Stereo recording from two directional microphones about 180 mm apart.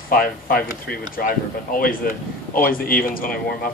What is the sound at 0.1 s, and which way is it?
A man's voice, 55° left (ahead or behind).